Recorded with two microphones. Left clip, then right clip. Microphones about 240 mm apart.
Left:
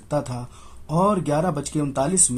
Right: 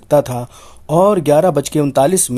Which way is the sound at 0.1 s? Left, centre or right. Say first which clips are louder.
Right 13 dB; right.